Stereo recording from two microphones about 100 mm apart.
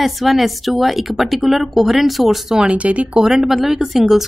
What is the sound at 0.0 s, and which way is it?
A woman's voice, centre (ahead or behind).